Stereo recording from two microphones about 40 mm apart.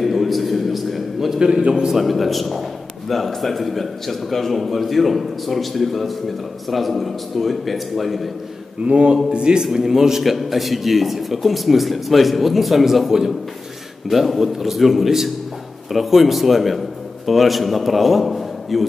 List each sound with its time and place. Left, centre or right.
0.0 s a sound: centre
1.9 s a man's voice: centre
8.8 s a man's voice: right
9.7 s a man's voice: centre